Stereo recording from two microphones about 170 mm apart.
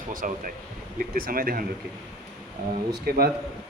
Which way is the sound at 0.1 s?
55° right (ahead or behind).